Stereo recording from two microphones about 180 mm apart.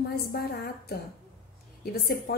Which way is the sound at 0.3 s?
60° left (ahead or behind).